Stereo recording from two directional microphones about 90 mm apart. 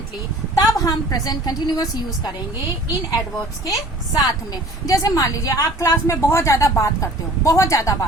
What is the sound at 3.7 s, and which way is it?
A woman's voice, 45° left (ahead or behind).